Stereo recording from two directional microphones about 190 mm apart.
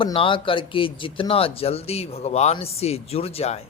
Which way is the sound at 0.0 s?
25° left (ahead or behind).